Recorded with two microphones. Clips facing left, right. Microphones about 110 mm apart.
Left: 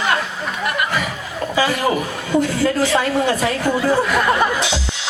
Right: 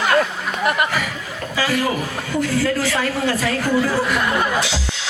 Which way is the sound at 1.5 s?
25° left (ahead or behind).